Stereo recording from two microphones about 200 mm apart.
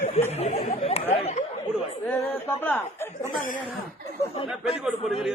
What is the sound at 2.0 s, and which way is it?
Speech, 10° left (ahead or behind).